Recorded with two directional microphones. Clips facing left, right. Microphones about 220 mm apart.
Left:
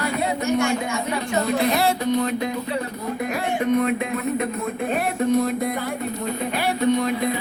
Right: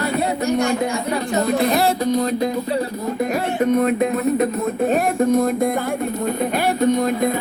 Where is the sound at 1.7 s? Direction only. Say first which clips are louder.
Right 3 dB; 35° right (ahead or behind).